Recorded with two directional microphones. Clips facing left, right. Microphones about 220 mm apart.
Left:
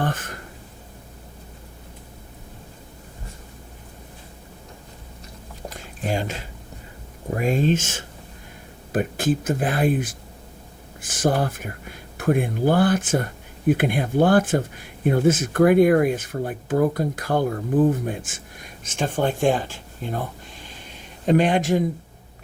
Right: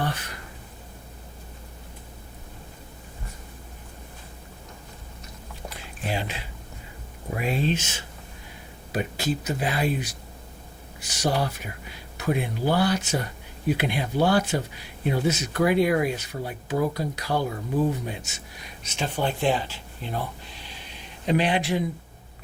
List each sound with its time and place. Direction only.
0.0 s speech: 50° left (ahead or behind)
5.6 s a sound: 45° left (ahead or behind)
7.3 s speech: 45° left (ahead or behind)